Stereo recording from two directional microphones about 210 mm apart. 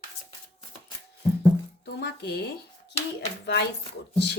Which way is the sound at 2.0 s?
50° left (ahead or behind).